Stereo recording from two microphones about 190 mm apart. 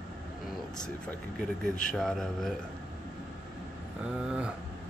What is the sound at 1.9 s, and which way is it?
Speech, centre (ahead or behind).